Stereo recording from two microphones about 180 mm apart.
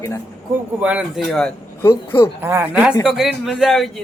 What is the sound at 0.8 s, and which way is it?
Speech, 5° right (ahead or behind).